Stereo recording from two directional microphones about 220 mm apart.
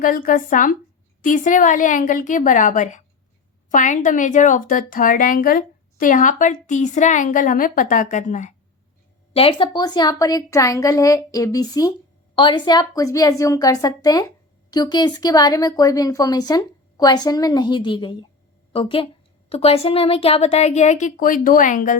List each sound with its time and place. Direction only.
0.0 s speech: 40° left (ahead or behind)